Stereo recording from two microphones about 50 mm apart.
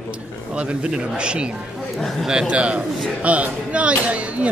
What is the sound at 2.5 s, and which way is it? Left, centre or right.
Speech, right.